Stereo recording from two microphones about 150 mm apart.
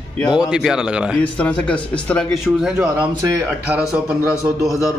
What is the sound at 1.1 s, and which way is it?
Speech, 10° left (ahead or behind).